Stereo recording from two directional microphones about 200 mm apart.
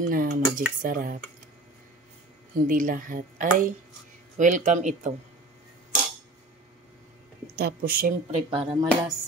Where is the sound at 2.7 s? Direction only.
40° right (ahead or behind).